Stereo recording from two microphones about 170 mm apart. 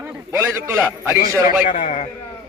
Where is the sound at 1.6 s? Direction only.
45° left (ahead or behind).